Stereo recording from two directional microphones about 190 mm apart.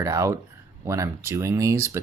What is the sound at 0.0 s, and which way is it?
Speech, 15° right (ahead or behind).